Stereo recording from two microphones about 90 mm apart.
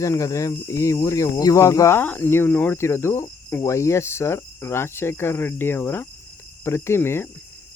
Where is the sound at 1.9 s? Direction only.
20° left (ahead or behind).